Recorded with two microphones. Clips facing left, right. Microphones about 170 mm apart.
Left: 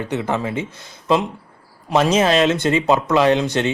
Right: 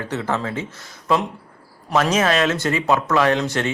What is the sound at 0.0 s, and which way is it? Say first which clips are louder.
Speech: left 2 dB; 15° left (ahead or behind).